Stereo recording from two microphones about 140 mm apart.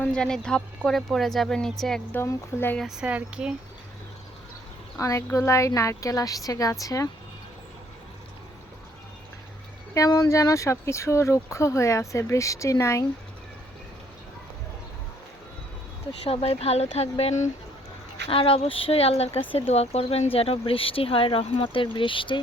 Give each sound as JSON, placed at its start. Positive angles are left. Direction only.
{"t": 0.0, "sound": "a woman's voice", "side_deg": 5}
{"t": 2.1, "sound": "a woman's voice", "side_deg": 15}
{"t": 2.7, "sound": "speech", "side_deg": -5}
{"t": 4.9, "sound": "speech", "side_deg": 20}
{"t": 9.9, "sound": "speech", "side_deg": 25}
{"t": 16.2, "sound": "speech", "side_deg": 45}
{"t": 18.3, "sound": "speech", "side_deg": 40}